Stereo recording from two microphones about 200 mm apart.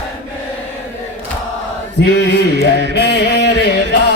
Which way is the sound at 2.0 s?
55° left (ahead or behind).